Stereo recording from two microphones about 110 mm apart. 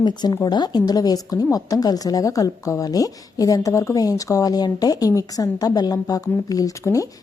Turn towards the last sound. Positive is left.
turn(degrees=30)  # may be behind; listen again after turning